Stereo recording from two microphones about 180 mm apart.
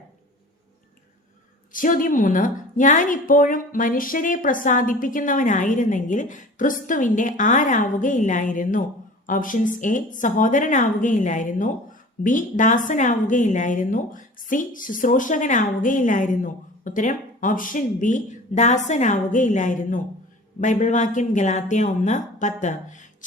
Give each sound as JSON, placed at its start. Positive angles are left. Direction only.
{"t": 1.7, "sound": "a woman's voice", "side_deg": 50}